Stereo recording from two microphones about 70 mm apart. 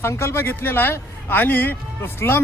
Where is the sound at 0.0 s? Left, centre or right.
Left.